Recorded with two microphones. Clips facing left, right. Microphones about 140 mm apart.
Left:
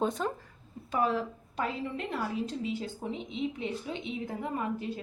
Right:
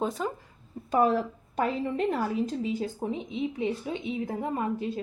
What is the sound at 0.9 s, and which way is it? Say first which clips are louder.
Speech: right 5 dB; 45° right (ahead or behind).